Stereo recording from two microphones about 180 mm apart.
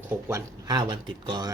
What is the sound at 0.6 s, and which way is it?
Speech, 20° right (ahead or behind).